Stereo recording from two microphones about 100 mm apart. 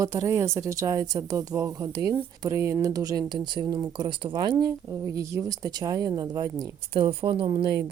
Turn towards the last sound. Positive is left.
turn(degrees=-65)  # may be behind; listen again after turning